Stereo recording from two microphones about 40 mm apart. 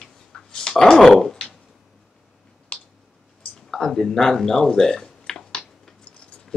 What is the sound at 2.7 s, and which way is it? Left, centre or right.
Clicking, left.